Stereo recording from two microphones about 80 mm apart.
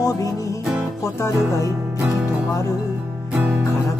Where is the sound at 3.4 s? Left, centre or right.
Right.